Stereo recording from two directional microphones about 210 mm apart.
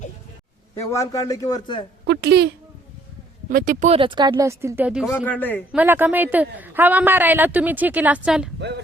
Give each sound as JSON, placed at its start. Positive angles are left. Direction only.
{"t": 0.8, "sound": "a man's voice", "side_deg": 15}
{"t": 2.0, "sound": "a woman's voice", "side_deg": -50}
{"t": 3.5, "sound": "speech", "side_deg": -40}
{"t": 5.1, "sound": "a man's voice", "side_deg": 10}
{"t": 5.7, "sound": "speech", "side_deg": -10}